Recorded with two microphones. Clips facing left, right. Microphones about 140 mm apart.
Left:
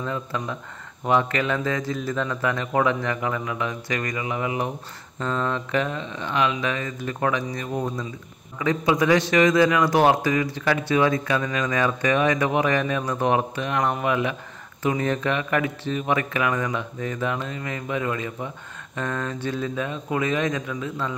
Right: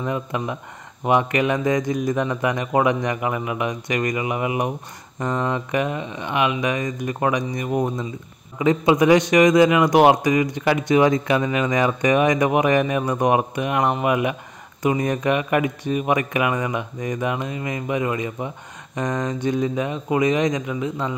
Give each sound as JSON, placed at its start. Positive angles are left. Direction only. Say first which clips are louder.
{"t": 0.0, "sound": "a man's voice", "louder": "right 4 dB", "side_deg": -15}